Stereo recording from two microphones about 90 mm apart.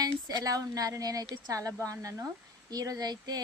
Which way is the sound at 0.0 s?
45° right (ahead or behind).